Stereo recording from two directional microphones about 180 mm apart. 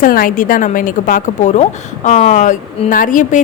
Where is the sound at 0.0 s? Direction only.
50° left (ahead or behind).